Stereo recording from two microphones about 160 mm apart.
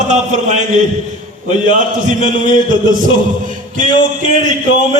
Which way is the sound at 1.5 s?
50° right (ahead or behind).